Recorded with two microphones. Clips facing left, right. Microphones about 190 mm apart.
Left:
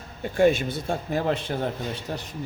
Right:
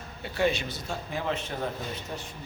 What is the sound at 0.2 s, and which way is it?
A man's voice, 50° left (ahead or behind).